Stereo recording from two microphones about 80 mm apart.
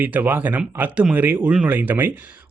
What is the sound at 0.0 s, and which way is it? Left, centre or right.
Speech, right.